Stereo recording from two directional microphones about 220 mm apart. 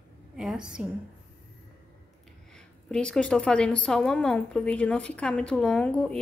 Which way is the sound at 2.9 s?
5° left (ahead or behind).